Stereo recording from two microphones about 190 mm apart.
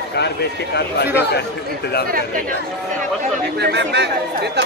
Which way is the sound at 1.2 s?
60° left (ahead or behind).